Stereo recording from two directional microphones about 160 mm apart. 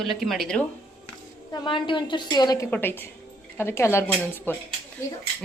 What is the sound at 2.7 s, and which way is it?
Speech, 15° left (ahead or behind).